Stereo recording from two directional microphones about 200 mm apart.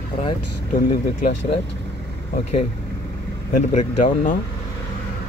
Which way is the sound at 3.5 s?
40° left (ahead or behind).